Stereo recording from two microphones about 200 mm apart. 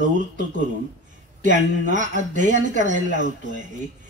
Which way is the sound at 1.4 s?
40° right (ahead or behind).